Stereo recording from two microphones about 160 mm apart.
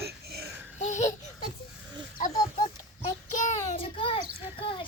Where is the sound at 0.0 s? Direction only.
80° right.